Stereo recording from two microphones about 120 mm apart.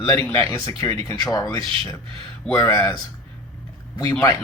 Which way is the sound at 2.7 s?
25° left (ahead or behind).